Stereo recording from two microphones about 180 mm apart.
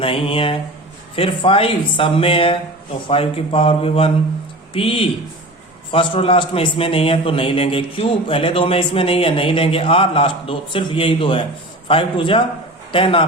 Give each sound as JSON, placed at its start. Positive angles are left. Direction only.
{"t": 0.0, "sound": "a man's voice", "side_deg": 30}